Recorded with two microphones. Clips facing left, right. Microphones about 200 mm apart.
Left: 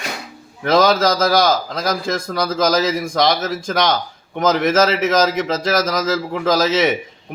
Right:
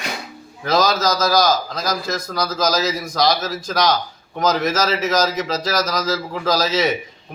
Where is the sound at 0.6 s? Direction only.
25° left (ahead or behind).